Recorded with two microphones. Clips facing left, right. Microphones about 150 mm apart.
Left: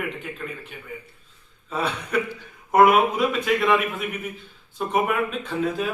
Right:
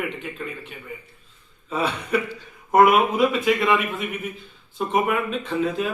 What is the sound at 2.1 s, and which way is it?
A man's voice, 5° right (ahead or behind).